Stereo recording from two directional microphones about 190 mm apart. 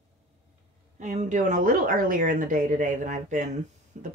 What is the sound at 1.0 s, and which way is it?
Speech, 40° right (ahead or behind).